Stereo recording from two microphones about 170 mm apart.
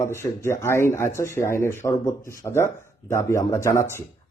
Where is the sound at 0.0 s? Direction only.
15° left (ahead or behind).